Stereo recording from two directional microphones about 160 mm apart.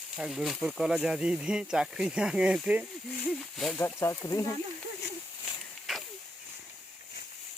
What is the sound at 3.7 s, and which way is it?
Speech, 15° left (ahead or behind).